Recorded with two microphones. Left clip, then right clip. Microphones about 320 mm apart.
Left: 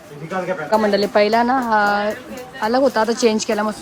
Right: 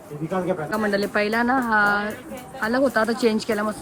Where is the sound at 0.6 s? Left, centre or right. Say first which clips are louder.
Left 7 dB; centre.